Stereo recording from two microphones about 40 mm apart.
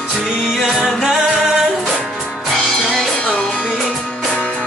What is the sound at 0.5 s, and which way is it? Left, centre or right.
Music, centre.